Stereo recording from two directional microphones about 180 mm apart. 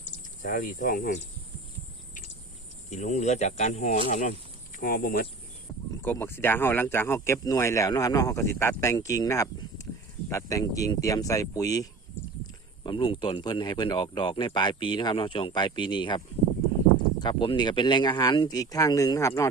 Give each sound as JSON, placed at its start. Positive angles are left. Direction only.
{"t": 0.4, "sound": "speech", "side_deg": 50}
{"t": 2.9, "sound": "speech", "side_deg": 40}
{"t": 4.8, "sound": "speech", "side_deg": 50}
{"t": 6.0, "sound": "speech", "side_deg": 10}